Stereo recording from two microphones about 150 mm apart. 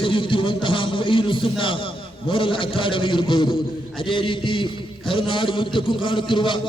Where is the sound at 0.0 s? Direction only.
35° left (ahead or behind).